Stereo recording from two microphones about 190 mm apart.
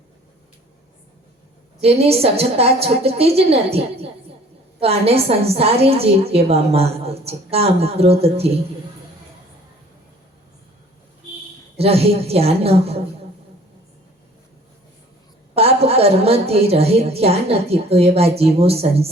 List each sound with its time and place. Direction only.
1.8 s a woman's voice: 30° right (ahead or behind)
11.8 s a woman's voice: 30° right (ahead or behind)
15.5 s a woman's voice: 30° right (ahead or behind)